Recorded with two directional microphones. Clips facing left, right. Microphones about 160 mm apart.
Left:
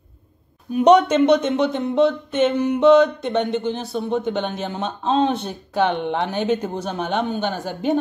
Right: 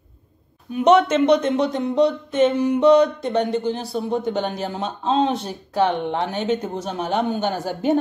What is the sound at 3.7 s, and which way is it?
Speech, 5° right (ahead or behind).